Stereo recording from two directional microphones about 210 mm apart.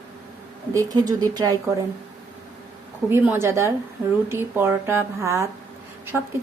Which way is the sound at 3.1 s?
10° right (ahead or behind).